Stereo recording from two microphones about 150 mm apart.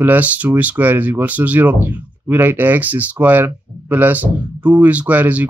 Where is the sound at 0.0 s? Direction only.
10° right (ahead or behind).